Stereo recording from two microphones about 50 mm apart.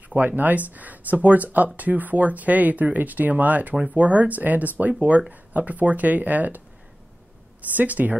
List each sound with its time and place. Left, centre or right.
0.1 s speech: right
7.7 s speech: right